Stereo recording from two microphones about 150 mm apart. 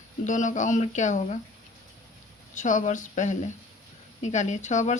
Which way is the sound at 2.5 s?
55° left (ahead or behind).